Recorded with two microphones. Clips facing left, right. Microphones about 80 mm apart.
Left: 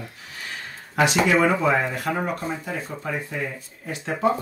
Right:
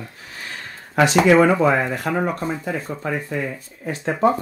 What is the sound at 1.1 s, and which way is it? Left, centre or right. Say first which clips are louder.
Speech: right 6 dB; right.